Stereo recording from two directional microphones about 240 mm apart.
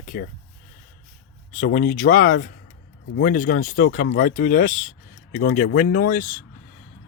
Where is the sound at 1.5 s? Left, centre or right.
Left.